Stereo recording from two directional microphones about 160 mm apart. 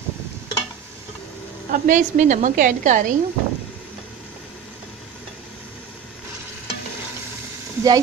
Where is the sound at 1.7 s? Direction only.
50° right (ahead or behind).